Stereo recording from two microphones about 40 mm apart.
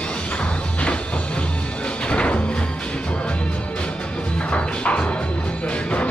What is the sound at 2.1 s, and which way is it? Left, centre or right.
Music, left.